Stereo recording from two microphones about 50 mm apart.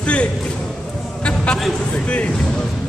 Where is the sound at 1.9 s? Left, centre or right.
Left.